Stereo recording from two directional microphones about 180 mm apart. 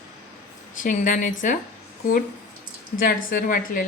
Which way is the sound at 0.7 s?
45° left (ahead or behind).